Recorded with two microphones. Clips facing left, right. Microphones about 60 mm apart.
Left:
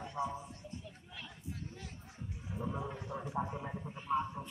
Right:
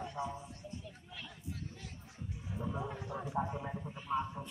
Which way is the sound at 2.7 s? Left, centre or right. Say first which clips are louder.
Right 1 dB; centre.